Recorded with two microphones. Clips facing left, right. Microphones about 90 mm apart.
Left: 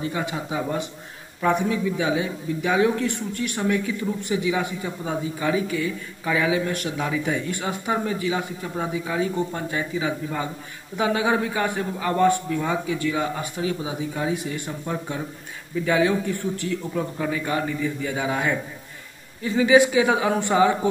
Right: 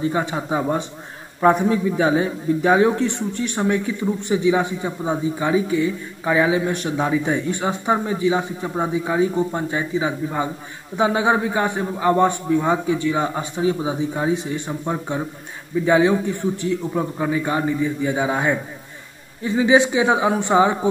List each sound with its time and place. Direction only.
0.1 s a man's voice: 35° right (ahead or behind)